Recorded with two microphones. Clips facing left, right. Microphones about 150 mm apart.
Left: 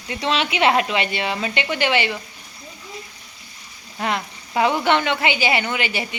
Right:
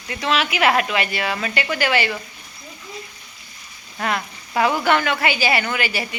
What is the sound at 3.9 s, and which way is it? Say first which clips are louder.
Speech: even; 20° left (ahead or behind).